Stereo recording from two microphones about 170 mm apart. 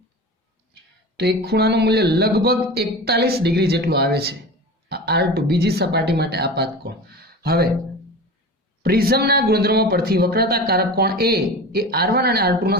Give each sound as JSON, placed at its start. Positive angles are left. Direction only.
{"t": 1.1, "sound": "speech", "side_deg": -70}
{"t": 8.8, "sound": "speech", "side_deg": -65}